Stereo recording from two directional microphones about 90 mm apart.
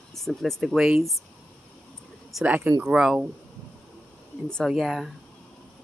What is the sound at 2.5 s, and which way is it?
Speech, 15° right (ahead or behind).